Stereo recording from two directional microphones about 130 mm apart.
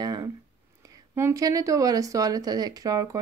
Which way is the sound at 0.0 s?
30° right (ahead or behind).